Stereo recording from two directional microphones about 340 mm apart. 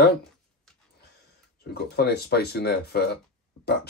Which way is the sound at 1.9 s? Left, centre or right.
Left.